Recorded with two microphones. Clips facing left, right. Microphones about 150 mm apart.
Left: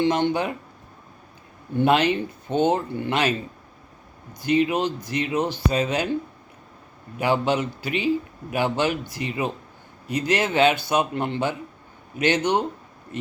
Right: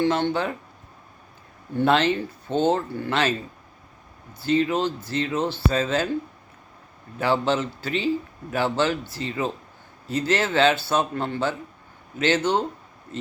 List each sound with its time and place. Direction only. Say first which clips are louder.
0.0 s a man's voice: left 1 dB; 15° left (ahead or behind)
1.8 s a man's voice: left 1 dB; 15° left (ahead or behind)
4.4 s a man's voice: left 1 dB; 15° left (ahead or behind)
7.2 s a man's voice: even; 15° left (ahead or behind)